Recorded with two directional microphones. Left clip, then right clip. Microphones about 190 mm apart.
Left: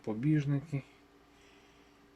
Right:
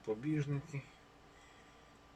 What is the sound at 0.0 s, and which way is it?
Speech, 55° left (ahead or behind).